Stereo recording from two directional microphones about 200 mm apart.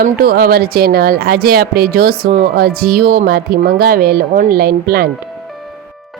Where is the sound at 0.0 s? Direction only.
50° right (ahead or behind).